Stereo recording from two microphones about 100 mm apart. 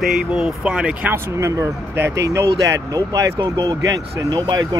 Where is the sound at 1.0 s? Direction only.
25° right (ahead or behind).